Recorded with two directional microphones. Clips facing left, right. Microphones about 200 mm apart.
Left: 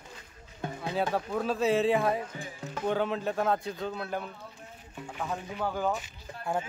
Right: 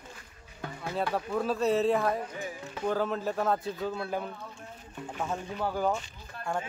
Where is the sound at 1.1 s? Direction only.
Centre (ahead or behind).